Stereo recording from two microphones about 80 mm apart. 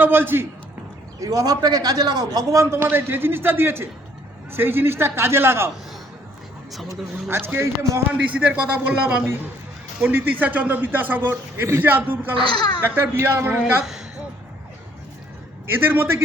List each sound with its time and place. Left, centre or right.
0.0 s a man's voice: right
1.2 s a man's voice: right
2.6 s a man's voice: right
7.3 s a man's voice: right
8.1 s a man's voice: centre
10.4 s a man's voice: right
12.4 s speech: left
12.8 s a man's voice: right
15.6 s a man's voice: right